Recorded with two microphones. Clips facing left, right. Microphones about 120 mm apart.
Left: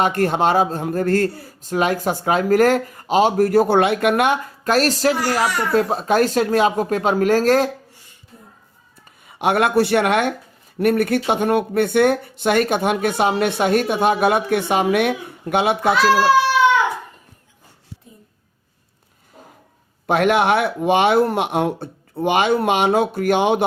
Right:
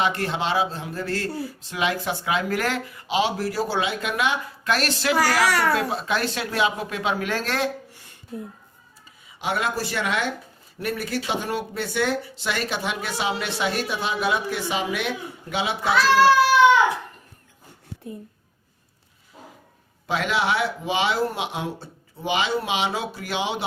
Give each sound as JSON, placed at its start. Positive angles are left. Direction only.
{"t": 0.0, "sound": "speech", "side_deg": 45}
{"t": 5.1, "sound": "a child's voice", "side_deg": -90}
{"t": 5.7, "sound": "speech", "side_deg": 40}
{"t": 8.3, "sound": "speech", "side_deg": -70}
{"t": 9.2, "sound": "speech", "side_deg": 55}
{"t": 20.1, "sound": "speech", "side_deg": 55}